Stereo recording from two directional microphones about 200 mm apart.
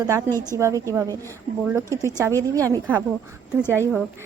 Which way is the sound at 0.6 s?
15° right (ahead or behind).